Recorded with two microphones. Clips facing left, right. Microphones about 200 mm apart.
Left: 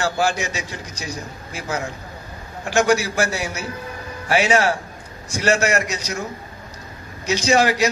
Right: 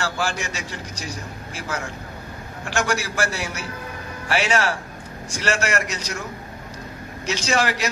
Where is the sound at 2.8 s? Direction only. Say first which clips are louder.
Left 6 dB; 45° left (ahead or behind).